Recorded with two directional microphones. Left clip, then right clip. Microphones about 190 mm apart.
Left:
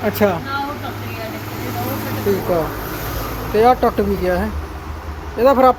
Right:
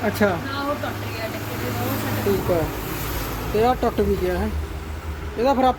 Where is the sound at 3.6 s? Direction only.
Centre (ahead or behind).